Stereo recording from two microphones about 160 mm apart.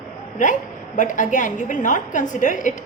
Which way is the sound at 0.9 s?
50° left (ahead or behind).